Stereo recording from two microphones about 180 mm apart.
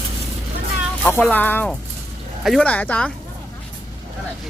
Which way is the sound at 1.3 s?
10° left (ahead or behind).